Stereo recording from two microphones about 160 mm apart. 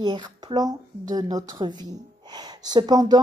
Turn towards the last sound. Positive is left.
turn(degrees=-25)  # may be behind; listen again after turning